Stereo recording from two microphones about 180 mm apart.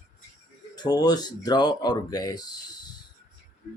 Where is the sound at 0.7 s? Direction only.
20° left (ahead or behind).